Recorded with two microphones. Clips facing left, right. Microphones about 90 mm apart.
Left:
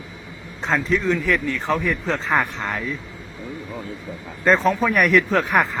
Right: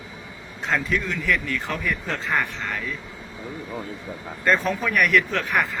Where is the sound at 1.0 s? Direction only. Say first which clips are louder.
Left 5 dB; 35° left (ahead or behind).